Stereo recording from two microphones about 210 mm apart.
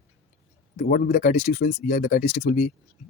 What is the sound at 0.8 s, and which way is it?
Speech, 45° left (ahead or behind).